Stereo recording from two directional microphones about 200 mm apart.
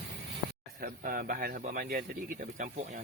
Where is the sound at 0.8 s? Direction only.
45° right (ahead or behind).